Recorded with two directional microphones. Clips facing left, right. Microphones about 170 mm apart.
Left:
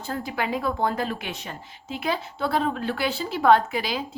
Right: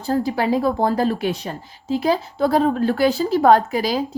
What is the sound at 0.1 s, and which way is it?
A woman's voice, 35° right (ahead or behind).